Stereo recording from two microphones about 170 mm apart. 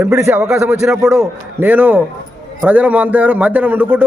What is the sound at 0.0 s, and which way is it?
A man's voice, 15° right (ahead or behind).